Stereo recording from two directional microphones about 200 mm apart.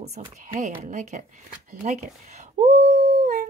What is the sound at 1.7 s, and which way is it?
Dog, 40° right (ahead or behind).